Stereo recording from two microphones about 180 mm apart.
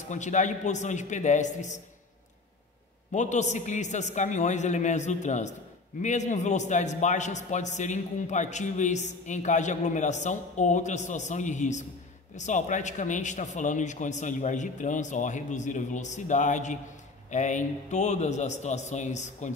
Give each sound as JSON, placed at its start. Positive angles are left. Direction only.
{"t": 0.1, "sound": "a man's voice", "side_deg": 40}
{"t": 3.1, "sound": "a man's voice", "side_deg": 40}